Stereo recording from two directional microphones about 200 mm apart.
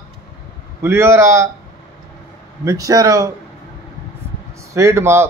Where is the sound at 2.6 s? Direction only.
15° right (ahead or behind).